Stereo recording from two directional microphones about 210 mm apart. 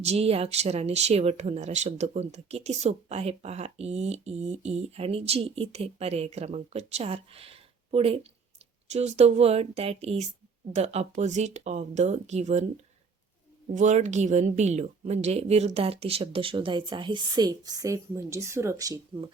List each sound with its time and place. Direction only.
0.0 s a woman's voice: 30° right (ahead or behind)